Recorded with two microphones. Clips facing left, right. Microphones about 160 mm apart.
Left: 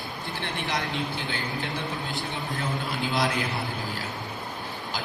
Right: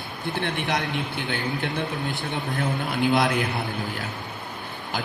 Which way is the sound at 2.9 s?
55° right (ahead or behind).